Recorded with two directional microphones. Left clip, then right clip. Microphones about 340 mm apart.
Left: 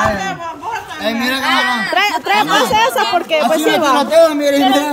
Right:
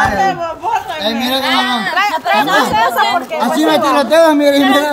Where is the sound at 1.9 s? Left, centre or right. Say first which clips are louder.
Right 1 dB; left.